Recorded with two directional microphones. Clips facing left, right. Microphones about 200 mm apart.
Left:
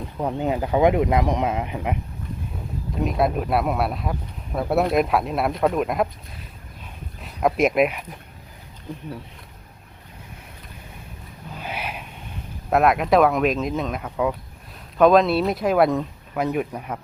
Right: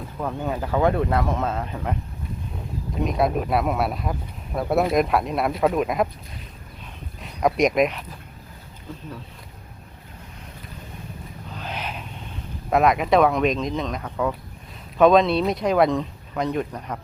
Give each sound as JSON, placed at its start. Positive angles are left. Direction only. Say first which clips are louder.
{"t": 0.2, "sound": "speech", "louder": "left 3 dB", "side_deg": 20}
{"t": 3.0, "sound": "speech", "louder": "even", "side_deg": 0}
{"t": 7.2, "sound": "speech", "louder": "even", "side_deg": 0}
{"t": 8.9, "sound": "speech", "louder": "left 3 dB", "side_deg": 15}
{"t": 11.5, "sound": "a sound", "louder": "left 1 dB", "side_deg": 10}
{"t": 12.7, "sound": "speech", "louder": "left 1 dB", "side_deg": 0}